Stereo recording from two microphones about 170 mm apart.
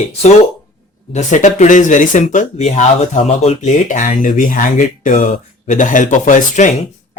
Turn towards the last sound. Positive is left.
turn(degrees=45)  # may be behind; listen again after turning